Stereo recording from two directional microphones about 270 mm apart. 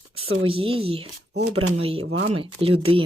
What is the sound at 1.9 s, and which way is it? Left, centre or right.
Speech, right.